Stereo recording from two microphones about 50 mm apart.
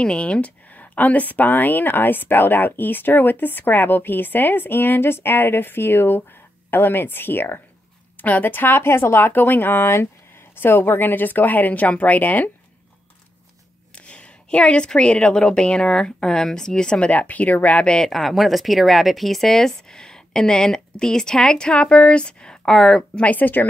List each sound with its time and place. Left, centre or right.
0.0 s speech: left
13.9 s a woman's voice: left
17.1 s speech: left
17.8 s speech: centre
18.1 s speech: centre
22.7 s speech: centre
23.1 s speech: left